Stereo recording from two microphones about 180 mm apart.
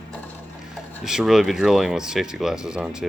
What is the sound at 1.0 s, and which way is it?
A woman's voice, centre (ahead or behind).